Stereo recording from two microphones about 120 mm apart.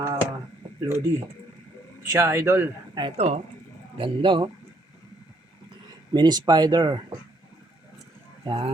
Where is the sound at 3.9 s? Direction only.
45° right (ahead or behind).